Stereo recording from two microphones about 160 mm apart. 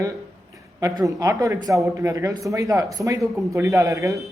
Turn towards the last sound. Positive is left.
turn(degrees=-20)  # may be behind; listen again after turning